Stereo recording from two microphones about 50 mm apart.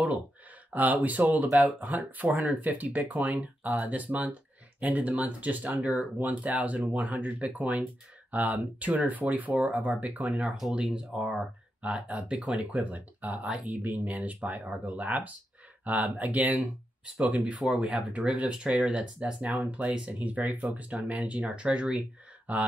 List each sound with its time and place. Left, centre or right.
0.7 s speech: right
10.8 s speech: centre